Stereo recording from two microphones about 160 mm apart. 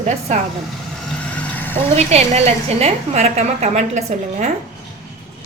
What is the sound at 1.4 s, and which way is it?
Vehicle, 10° left (ahead or behind).